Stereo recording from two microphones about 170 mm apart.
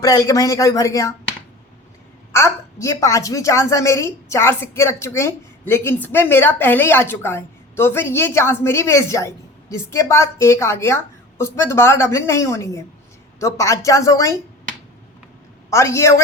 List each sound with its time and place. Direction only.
0.0 s speech: 20° left (ahead or behind)
2.3 s a woman's voice: 15° left (ahead or behind)
15.7 s a woman's voice: 15° left (ahead or behind)